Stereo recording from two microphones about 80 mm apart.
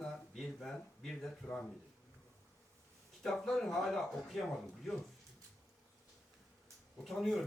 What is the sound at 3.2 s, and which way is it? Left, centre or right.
A man's voice, centre.